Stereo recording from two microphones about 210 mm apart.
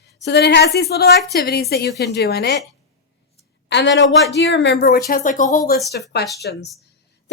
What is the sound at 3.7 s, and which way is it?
A woman's voice, 60° left (ahead or behind).